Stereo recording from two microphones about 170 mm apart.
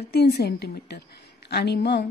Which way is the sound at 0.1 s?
70° left (ahead or behind).